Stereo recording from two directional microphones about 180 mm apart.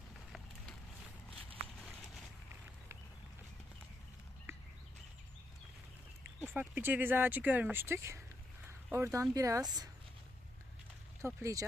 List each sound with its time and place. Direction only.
6.5 s speech: 10° right (ahead or behind)
8.6 s a sound: 15° right (ahead or behind)
9.3 s speech: 20° right (ahead or behind)
11.2 s speech: 15° right (ahead or behind)